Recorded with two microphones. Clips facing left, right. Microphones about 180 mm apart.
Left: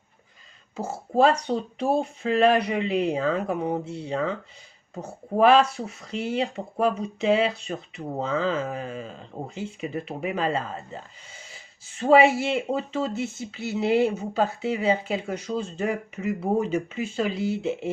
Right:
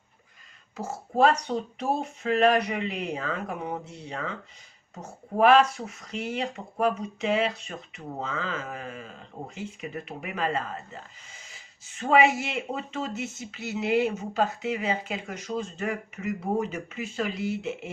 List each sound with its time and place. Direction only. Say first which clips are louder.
0.8 s speech: left 2 dB; 30° left (ahead or behind)
11.9 s speech: left 4 dB; 35° left (ahead or behind)